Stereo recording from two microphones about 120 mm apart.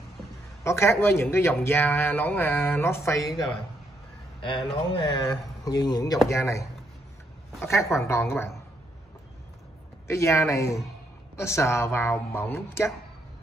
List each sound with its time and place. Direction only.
0.7 s speech: 20° left (ahead or behind)
4.4 s speech: 45° left (ahead or behind)
6.3 s speech: 25° left (ahead or behind)
10.0 s speech: 25° left (ahead or behind)